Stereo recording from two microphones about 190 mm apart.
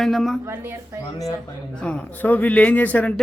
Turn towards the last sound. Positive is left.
turn(degrees=10)  # may be behind; listen again after turning